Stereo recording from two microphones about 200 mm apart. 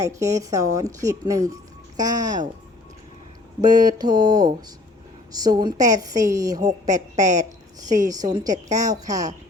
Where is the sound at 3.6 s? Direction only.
20° right (ahead or behind).